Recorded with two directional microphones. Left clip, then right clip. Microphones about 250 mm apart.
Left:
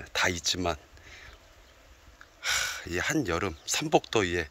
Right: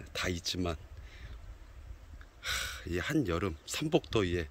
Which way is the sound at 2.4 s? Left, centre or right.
Centre.